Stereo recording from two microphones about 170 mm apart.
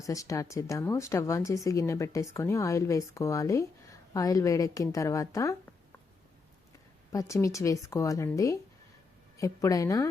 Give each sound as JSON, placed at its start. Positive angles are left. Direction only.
{"t": 0.0, "sound": "speech", "side_deg": 20}
{"t": 7.1, "sound": "speech", "side_deg": 20}
{"t": 9.4, "sound": "speech", "side_deg": 20}